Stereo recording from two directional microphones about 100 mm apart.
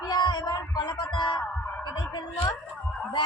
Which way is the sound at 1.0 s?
50° left (ahead or behind).